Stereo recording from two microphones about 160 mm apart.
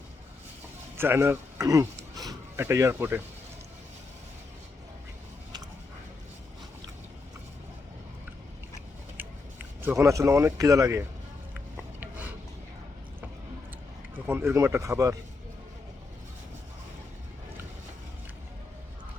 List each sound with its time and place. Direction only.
0.9 s speech: 15° right (ahead or behind)
9.1 s speech: 15° right (ahead or behind)
11.5 s rub: 10° right (ahead or behind)
14.3 s speech: 15° right (ahead or behind)